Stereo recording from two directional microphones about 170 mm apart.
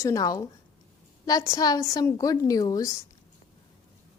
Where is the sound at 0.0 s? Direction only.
20° left (ahead or behind).